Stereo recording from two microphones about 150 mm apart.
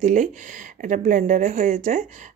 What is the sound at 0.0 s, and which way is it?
Speech, 55° right (ahead or behind).